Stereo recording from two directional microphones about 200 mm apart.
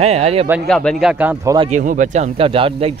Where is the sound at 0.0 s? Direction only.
30° right (ahead or behind).